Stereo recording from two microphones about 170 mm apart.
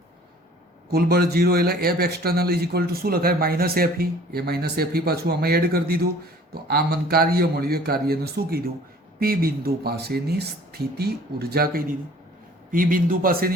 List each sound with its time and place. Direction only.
0.9 s a man's voice: 65° right (ahead or behind)